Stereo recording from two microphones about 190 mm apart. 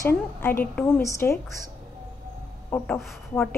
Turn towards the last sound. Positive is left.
turn(degrees=5)  # may be behind; listen again after turning